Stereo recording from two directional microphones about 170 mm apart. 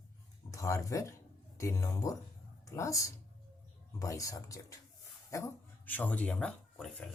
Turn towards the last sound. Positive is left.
turn(degrees=0)  # may be behind; listen again after turning